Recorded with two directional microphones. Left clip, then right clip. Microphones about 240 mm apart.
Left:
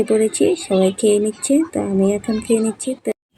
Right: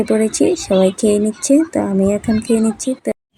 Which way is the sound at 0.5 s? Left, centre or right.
Right.